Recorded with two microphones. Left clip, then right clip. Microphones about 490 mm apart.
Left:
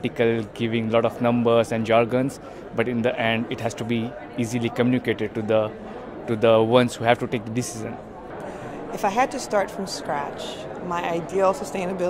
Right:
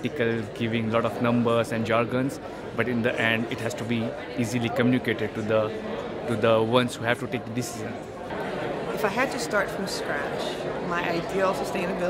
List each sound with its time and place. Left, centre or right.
0.0 s speech: left
9.0 s speech: left
10.9 s speech: left